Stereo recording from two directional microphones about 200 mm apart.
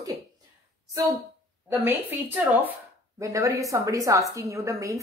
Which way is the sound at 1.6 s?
10° right (ahead or behind).